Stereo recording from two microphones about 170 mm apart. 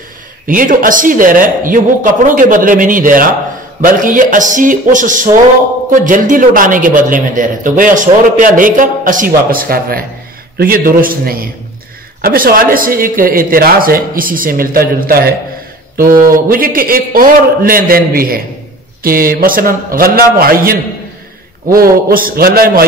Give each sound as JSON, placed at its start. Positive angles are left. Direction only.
{"t": 0.5, "sound": "a man's voice", "side_deg": -55}
{"t": 21.7, "sound": "speech", "side_deg": -60}